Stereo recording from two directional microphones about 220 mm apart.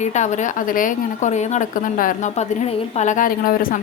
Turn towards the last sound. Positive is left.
turn(degrees=40)  # may be behind; listen again after turning